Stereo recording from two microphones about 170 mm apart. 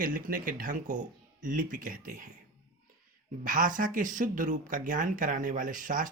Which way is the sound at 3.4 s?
55° right (ahead or behind).